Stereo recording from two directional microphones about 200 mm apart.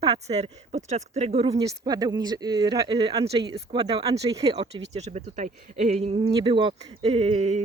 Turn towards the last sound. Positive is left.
turn(degrees=-35)  # may be behind; listen again after turning